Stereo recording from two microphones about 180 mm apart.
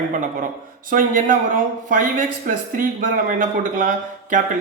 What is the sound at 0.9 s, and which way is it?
A man's voice, 50° right (ahead or behind).